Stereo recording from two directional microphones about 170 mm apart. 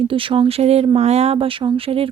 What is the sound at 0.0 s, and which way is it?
Speech, 30° right (ahead or behind).